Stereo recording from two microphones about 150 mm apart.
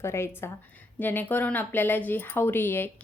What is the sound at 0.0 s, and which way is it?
A woman's voice, 15° left (ahead or behind).